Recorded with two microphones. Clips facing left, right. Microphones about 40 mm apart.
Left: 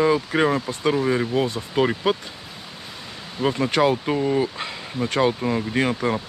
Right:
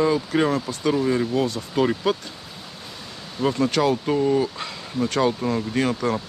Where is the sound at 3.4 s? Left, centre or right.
Centre.